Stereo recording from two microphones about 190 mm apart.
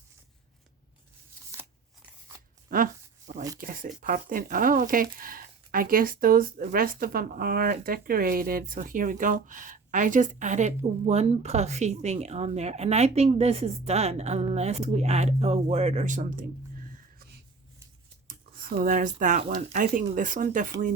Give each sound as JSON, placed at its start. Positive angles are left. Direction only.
{"t": 1.5, "sound": "shuffling cards", "side_deg": -15}
{"t": 2.6, "sound": "speech", "side_deg": -50}
{"t": 18.3, "sound": "a sound", "side_deg": -50}
{"t": 18.8, "sound": "speech", "side_deg": -45}